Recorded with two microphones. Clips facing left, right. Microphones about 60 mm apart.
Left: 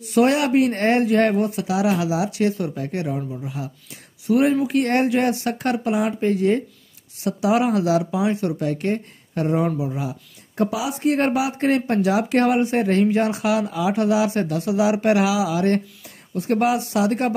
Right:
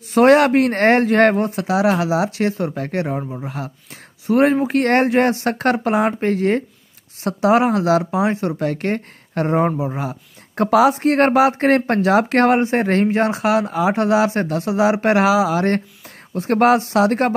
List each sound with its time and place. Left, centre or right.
0.1 s speech: right
7.5 s speech: right
8.5 s speech: right
10.5 s speech: right